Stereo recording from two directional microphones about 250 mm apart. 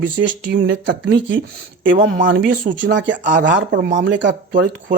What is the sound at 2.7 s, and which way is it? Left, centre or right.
Speech, right.